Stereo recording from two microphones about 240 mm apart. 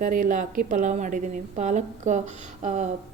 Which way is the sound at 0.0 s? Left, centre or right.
Right.